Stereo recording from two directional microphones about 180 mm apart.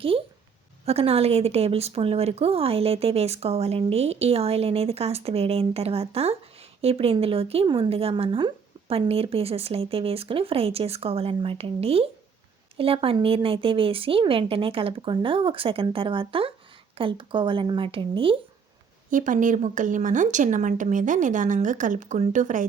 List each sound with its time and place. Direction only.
0.9 s speech: 35° right (ahead or behind)
19.1 s a woman's voice: 45° right (ahead or behind)